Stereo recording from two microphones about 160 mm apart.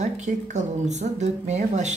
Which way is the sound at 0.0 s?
45° right (ahead or behind).